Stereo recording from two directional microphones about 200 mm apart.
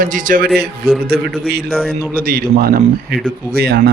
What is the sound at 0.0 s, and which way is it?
Speech, 40° right (ahead or behind).